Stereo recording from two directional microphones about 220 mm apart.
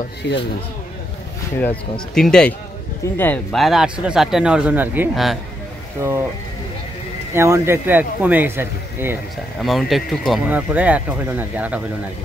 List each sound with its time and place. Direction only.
0.2 s speech: 50° left (ahead or behind)
1.6 s speech: 5° left (ahead or behind)
5.9 s speech: 10° right (ahead or behind)
7.3 s speech: 10° right (ahead or behind)